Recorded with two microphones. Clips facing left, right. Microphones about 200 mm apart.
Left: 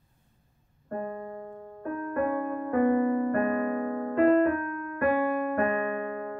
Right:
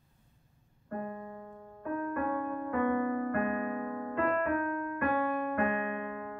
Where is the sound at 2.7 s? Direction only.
35° left (ahead or behind).